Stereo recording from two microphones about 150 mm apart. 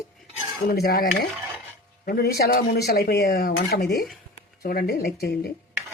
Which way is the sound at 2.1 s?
90° left.